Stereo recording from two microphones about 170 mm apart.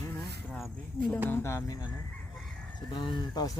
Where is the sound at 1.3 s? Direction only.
15° left (ahead or behind).